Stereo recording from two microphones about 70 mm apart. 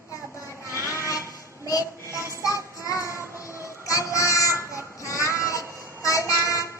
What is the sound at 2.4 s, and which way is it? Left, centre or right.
Child singing, left.